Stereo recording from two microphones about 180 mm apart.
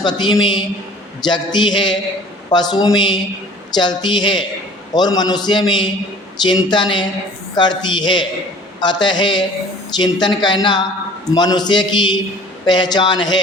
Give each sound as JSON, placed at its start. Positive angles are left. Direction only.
{"t": 0.0, "sound": "a man's voice", "side_deg": 25}